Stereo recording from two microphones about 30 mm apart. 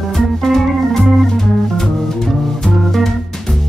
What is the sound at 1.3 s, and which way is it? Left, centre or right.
Music, centre.